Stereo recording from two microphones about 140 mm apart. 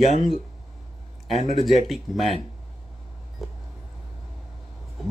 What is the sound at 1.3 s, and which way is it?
Speech, 50° left (ahead or behind).